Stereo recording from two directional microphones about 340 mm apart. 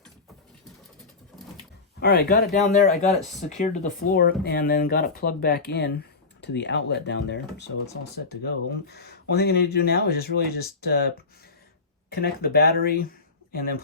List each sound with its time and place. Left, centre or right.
2.0 s speech: left
12.1 s speech: left